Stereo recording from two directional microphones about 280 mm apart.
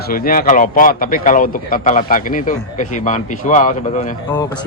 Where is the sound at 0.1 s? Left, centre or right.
Left.